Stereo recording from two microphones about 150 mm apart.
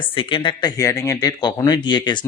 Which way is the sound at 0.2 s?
35° left (ahead or behind).